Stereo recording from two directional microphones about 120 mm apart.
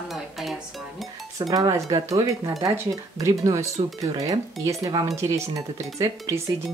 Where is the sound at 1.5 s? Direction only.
30° right (ahead or behind).